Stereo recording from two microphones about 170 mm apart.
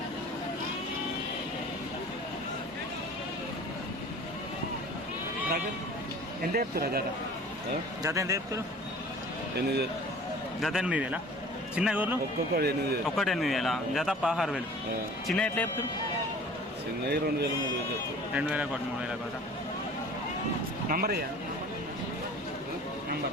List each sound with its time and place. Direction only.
6.4 s speech: 60° right (ahead or behind)
8.0 s speech: 20° right (ahead or behind)
10.6 s a man's voice: centre (ahead or behind)
12.5 s a man's voice: 65° right (ahead or behind)
13.1 s a man's voice: centre (ahead or behind)
15.3 s a man's voice: 10° left (ahead or behind)
17.1 s a man's voice: 70° right (ahead or behind)
18.3 s a man's voice: 5° right (ahead or behind)
20.8 s speech: 60° right (ahead or behind)